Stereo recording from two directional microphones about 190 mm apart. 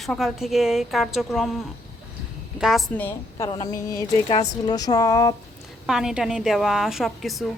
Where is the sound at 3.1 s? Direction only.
15° left (ahead or behind).